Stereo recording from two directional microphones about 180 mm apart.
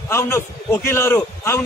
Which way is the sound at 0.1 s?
15° left (ahead or behind).